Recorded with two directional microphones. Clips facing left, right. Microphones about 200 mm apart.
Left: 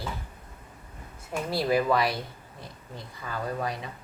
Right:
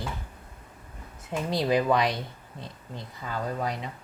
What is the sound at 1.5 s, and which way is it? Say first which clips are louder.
A woman's voice: right 1 dB; 20° right (ahead or behind).